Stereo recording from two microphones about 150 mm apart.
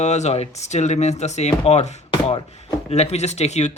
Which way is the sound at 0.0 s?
50° left (ahead or behind).